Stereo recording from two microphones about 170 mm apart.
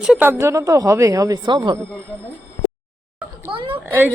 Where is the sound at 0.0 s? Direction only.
10° right (ahead or behind); by 1.8 s 25° right (ahead or behind).